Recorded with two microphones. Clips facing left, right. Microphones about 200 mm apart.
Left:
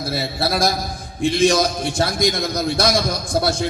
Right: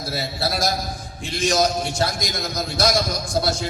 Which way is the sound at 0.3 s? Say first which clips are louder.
Left 4 dB; 55° left (ahead or behind).